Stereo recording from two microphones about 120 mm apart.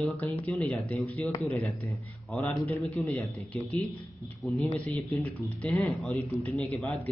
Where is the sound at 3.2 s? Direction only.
Centre (ahead or behind).